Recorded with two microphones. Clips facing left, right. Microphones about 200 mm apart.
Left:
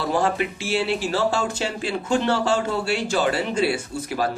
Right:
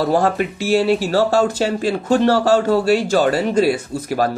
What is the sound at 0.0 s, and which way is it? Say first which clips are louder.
Speech: right 5 dB; 50° right (ahead or behind).